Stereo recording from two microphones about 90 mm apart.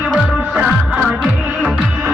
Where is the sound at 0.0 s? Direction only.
15° right (ahead or behind).